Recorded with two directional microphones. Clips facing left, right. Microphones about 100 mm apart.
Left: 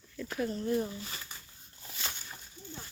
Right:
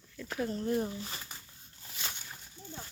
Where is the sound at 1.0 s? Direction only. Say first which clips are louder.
Right 1 dB; 25° right (ahead or behind).